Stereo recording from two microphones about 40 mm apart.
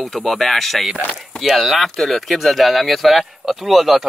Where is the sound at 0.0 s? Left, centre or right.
Centre.